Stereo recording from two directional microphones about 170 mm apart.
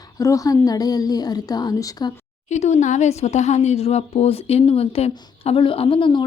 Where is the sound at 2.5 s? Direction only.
45° left (ahead or behind).